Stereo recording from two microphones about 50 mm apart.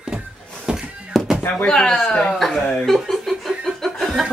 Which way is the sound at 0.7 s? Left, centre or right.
Centre.